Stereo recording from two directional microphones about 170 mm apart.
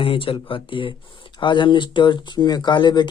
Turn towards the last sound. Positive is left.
turn(degrees=25)  # may be behind; listen again after turning